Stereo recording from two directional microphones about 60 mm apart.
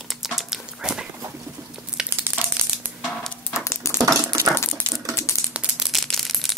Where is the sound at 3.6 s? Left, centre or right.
Left.